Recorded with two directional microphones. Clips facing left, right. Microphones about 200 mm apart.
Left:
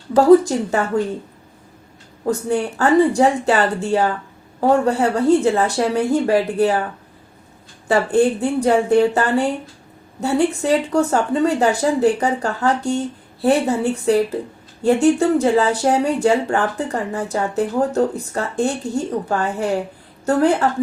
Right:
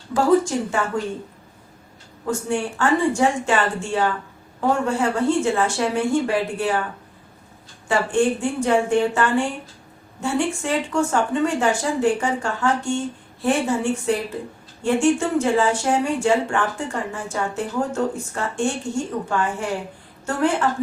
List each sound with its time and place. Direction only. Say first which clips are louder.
2.2 s speech: left 4 dB; 35° left (ahead or behind)
7.9 s speech: left 4 dB; 35° left (ahead or behind)